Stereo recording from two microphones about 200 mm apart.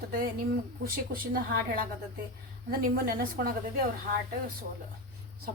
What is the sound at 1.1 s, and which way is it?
Speech, 45° right (ahead or behind).